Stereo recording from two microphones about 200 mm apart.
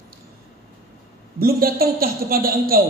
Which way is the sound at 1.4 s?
50° right (ahead or behind).